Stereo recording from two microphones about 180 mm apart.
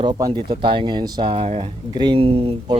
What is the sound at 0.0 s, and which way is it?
Speech, 25° right (ahead or behind).